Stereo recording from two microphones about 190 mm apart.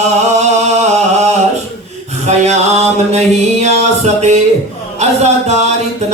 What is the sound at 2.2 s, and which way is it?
Mantra, 35° right (ahead or behind).